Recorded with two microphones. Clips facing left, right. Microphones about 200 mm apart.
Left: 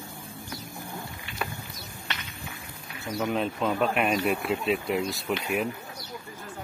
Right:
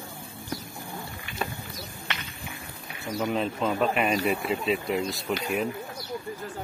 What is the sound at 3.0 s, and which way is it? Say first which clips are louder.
Speech: even; centre (ahead or behind).